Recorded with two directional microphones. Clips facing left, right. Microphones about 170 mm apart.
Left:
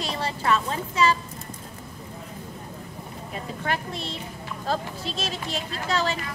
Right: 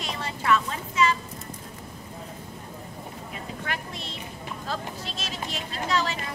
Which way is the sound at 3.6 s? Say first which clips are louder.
Left 7 dB; 35° left (ahead or behind).